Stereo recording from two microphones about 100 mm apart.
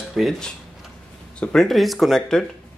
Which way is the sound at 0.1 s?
Centre (ahead or behind).